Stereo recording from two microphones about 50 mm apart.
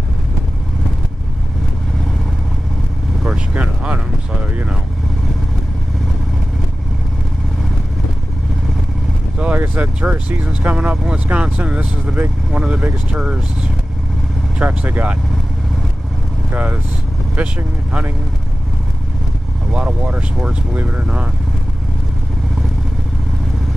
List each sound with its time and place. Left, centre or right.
3.3 s vehicle: right
9.4 s vehicle: right
10.0 s speech: right
14.6 s speech: right
16.5 s speech: right
19.7 s speech: right